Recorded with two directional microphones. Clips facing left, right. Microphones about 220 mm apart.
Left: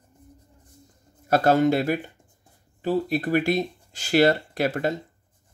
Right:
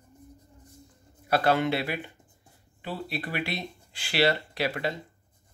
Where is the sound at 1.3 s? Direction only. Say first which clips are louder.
Left 5 dB; 45° left (ahead or behind).